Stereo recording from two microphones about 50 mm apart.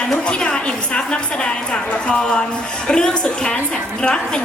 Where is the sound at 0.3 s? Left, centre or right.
Left.